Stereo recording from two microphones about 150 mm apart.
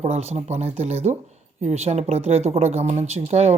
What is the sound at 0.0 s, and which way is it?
A woman's voice, 45° right (ahead or behind).